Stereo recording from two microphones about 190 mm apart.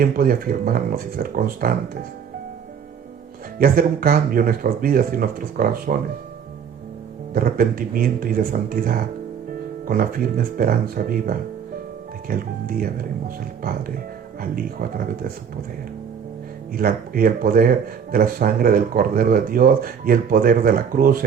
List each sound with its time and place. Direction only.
0.0 s speech: 50° right (ahead or behind)
3.6 s speech: 50° right (ahead or behind)
7.3 s speech: 50° right (ahead or behind)
16.7 s speech: 50° right (ahead or behind)